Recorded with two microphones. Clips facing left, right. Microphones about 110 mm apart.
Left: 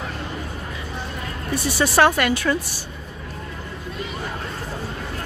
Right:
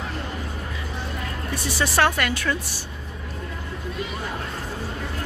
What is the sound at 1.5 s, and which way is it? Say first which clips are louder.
Speech: left 5 dB; 15° left (ahead or behind).